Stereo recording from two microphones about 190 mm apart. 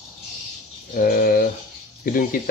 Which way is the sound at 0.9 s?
45° left (ahead or behind).